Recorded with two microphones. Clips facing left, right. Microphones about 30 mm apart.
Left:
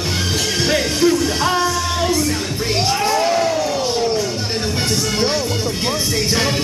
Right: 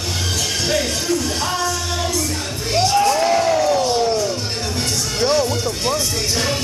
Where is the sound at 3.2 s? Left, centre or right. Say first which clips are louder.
Right 1 dB; centre.